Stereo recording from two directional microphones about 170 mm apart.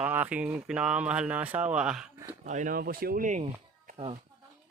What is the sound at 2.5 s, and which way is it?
Speech, 50° right (ahead or behind).